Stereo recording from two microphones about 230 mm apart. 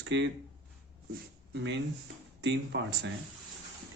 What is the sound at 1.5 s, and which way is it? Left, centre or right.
Speech, right.